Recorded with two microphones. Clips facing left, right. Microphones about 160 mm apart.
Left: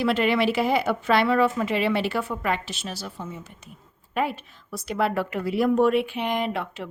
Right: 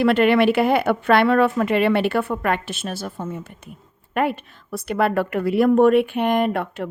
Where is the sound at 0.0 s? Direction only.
60° right (ahead or behind).